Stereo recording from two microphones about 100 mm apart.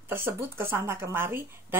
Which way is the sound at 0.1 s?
20° right (ahead or behind).